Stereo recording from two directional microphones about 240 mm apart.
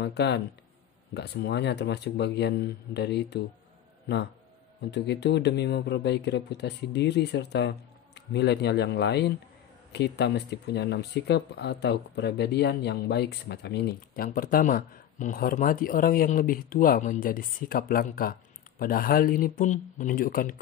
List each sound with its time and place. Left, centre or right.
0.0 s speech: left
4.9 s speech: left